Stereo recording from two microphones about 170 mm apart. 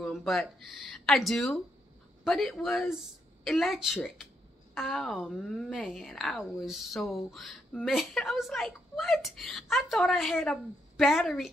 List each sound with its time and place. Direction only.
0.0 s a woman's voice: centre (ahead or behind)